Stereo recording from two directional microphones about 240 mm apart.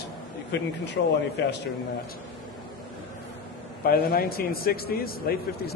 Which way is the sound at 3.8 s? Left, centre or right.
Left.